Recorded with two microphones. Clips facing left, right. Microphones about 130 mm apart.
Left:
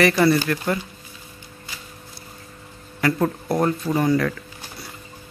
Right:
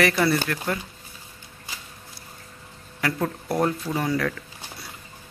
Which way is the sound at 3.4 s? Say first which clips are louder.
Left 3 dB; centre (ahead or behind).